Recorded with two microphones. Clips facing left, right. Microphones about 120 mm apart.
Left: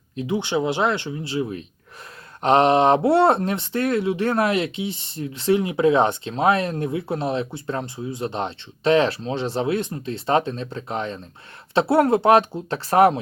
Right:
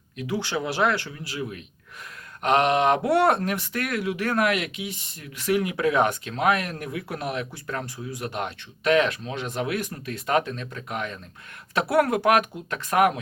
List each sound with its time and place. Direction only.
0.2 s speech: 20° left (ahead or behind)